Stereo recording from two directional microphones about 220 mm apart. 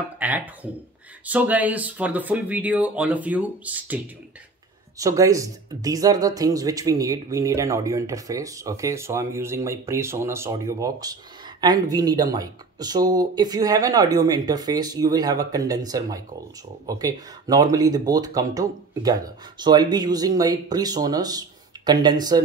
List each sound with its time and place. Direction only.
0.2 s speech: 5° right (ahead or behind)